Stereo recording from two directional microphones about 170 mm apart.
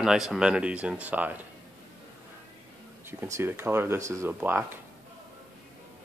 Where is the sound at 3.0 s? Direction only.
15° right (ahead or behind).